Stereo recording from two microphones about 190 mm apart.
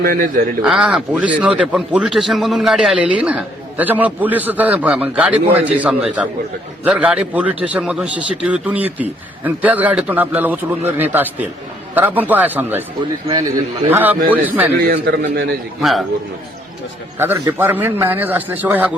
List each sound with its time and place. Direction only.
0.0 s a man's voice: 50° right (ahead or behind)
0.6 s a man's voice: 5° right (ahead or behind)
13.9 s a man's voice: 10° right (ahead or behind)
14.8 s a man's voice: 60° right (ahead or behind)
15.8 s a man's voice: centre (ahead or behind)
17.2 s a man's voice: 15° right (ahead or behind)